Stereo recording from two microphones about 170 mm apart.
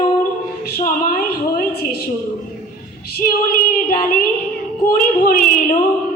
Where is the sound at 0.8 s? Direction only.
55° left (ahead or behind).